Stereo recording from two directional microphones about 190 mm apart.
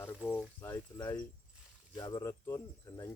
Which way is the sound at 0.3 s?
15° left (ahead or behind).